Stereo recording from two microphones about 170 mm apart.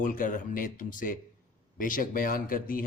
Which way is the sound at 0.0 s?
50° left (ahead or behind).